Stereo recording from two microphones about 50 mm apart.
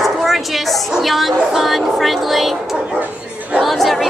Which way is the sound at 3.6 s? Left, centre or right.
Centre.